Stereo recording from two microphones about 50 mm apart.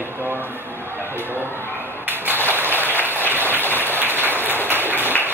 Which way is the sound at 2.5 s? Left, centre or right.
Right.